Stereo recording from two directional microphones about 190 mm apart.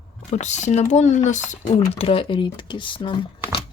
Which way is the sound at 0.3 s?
40° left (ahead or behind).